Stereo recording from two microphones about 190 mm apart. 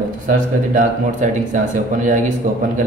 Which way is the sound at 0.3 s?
40° right (ahead or behind).